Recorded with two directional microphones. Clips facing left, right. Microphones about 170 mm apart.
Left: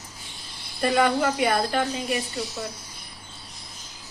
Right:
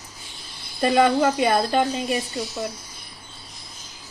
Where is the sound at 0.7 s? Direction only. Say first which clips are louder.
Right 3 dB; 25° right (ahead or behind).